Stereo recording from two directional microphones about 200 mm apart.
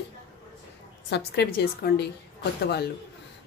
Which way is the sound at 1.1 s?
55° left (ahead or behind).